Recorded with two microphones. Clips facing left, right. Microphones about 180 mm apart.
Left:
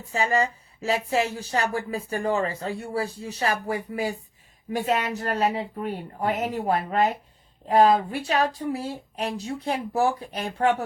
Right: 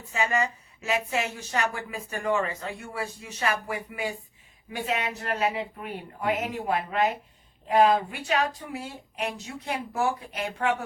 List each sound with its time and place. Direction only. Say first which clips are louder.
0.0 s speech: left 3 dB; 35° left (ahead or behind)